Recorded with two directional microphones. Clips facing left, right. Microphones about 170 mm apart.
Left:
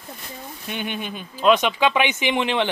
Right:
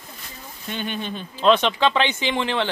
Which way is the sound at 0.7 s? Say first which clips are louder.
Right 1 dB; 15° left (ahead or behind).